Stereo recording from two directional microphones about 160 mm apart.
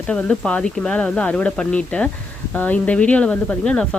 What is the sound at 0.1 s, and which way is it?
Speech, 5° left (ahead or behind).